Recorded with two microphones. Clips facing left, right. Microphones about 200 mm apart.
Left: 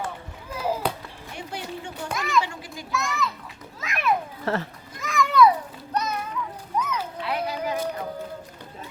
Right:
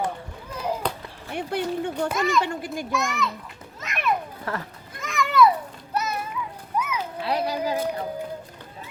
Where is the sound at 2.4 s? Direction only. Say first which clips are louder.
Right 7 dB; 55° right (ahead or behind).